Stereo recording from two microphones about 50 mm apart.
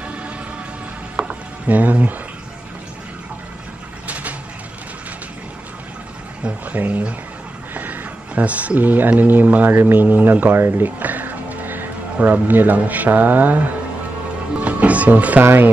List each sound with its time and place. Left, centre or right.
1.7 s speech: right
4.1 s vehicle: right
6.7 s speech: right
7.7 s a sound: right
9.2 s speech: right
10.0 s speech: right
14.5 s music: right
15.4 s speech: right